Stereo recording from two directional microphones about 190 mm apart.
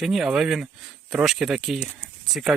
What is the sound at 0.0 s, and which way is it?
Speech, centre (ahead or behind).